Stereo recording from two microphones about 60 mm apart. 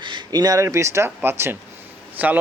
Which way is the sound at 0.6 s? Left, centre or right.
Right.